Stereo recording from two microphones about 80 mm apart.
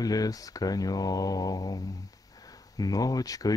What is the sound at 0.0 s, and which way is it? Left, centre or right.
Speech, left.